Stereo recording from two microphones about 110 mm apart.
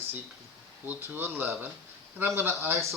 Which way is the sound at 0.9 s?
20° right (ahead or behind).